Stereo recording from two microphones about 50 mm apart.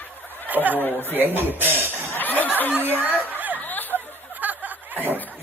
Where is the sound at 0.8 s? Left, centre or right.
Left.